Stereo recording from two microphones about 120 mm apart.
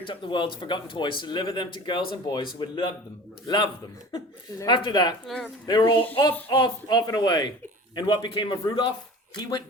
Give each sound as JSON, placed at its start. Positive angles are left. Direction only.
{"t": 0.0, "sound": "speech", "side_deg": 40}
{"t": 5.2, "sound": "speech", "side_deg": 0}
{"t": 5.6, "sound": "speech", "side_deg": 35}